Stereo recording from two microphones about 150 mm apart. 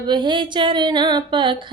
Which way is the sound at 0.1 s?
30° right (ahead or behind).